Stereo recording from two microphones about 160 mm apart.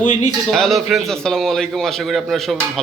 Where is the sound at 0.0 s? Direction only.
50° left (ahead or behind).